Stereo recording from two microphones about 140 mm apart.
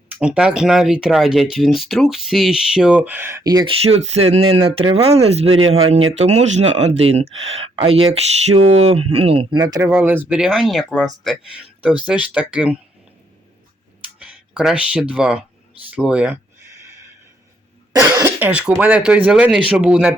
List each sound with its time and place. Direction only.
0.2 s speech: 5° right (ahead or behind); by 3.6 s 25° right (ahead or behind)
3.7 s speech: 50° right (ahead or behind)
9.6 s speech: 25° right (ahead or behind)
9.9 s speech: 15° right (ahead or behind)
14.2 s speech: 5° right (ahead or behind)
18.3 s speech: 15° right (ahead or behind)